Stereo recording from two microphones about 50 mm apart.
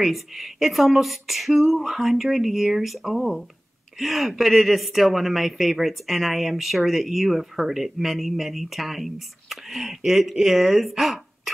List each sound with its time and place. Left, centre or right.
0.0 s a woman's voice: centre